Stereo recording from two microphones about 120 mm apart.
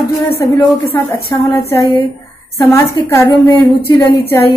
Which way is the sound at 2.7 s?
20° left (ahead or behind).